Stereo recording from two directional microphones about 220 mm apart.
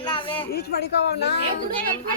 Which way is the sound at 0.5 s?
50° left (ahead or behind).